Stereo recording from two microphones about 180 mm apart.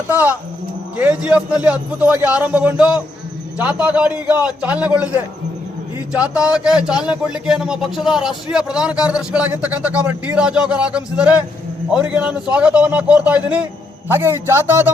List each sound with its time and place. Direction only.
0.1 s a man's voice: 10° right (ahead or behind)